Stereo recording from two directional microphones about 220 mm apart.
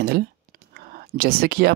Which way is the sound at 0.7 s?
40° right (ahead or behind).